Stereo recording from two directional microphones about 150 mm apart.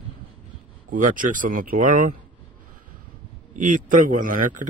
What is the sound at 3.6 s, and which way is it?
Speech, 60° right (ahead or behind).